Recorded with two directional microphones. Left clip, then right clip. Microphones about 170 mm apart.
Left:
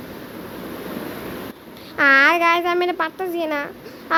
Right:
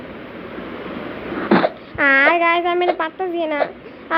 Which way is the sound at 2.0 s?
10° left (ahead or behind).